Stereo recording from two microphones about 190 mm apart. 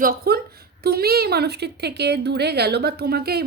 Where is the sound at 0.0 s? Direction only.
50° right (ahead or behind).